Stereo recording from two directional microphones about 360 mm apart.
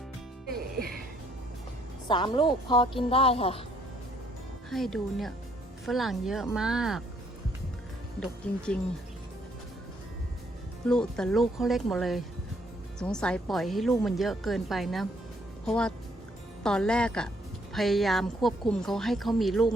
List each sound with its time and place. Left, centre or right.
2.0 s a woman's voice: centre
4.7 s speech: centre
8.2 s speech: centre
10.8 s speech: centre